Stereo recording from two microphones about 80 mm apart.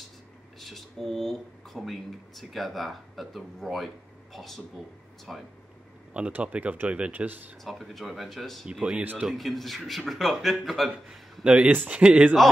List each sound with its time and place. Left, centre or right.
0.6 s speech: centre
6.1 s speech: centre
7.6 s speech: centre
8.9 s speech: centre
9.3 s speech: centre
11.4 s speech: centre